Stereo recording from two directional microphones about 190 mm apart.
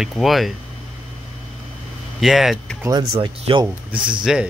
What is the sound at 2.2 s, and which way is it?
Speech, centre (ahead or behind).